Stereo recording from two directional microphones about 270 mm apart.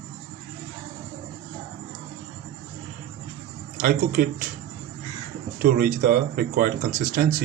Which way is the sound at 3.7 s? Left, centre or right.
Right.